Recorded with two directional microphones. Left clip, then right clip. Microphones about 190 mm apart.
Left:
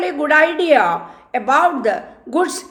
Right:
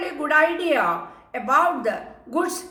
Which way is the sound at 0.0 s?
40° left (ahead or behind).